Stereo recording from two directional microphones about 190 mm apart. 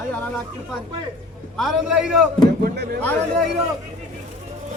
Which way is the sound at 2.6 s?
55° right (ahead or behind).